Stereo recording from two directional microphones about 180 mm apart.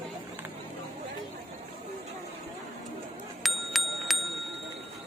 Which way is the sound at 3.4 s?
Centre (ahead or behind).